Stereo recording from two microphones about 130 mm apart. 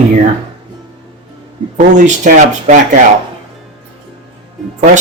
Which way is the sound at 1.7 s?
80° right.